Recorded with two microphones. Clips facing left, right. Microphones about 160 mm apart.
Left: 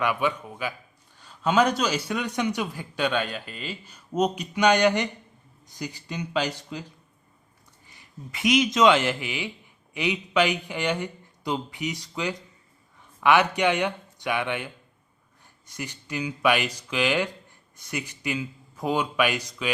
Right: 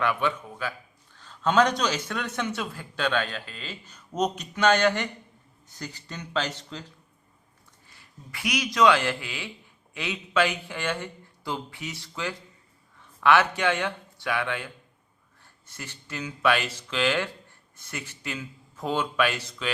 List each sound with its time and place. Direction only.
0.0 s a man's voice: 10° left (ahead or behind)
7.9 s a man's voice: 20° left (ahead or behind)